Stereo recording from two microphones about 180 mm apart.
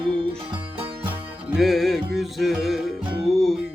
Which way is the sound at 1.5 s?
Centre (ahead or behind).